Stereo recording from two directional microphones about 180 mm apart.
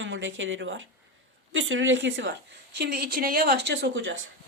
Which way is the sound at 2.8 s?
60° right (ahead or behind).